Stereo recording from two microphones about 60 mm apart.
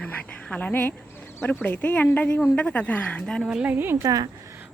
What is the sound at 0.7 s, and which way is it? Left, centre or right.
A woman's voice, left.